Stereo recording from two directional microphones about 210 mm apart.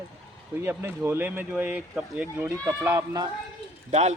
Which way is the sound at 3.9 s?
30° right (ahead or behind).